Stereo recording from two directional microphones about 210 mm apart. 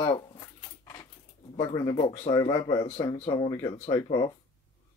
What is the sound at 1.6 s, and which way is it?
Speech, 20° left (ahead or behind).